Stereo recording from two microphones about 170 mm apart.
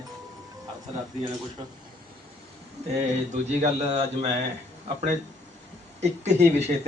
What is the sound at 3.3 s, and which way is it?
A man's voice, 40° right (ahead or behind).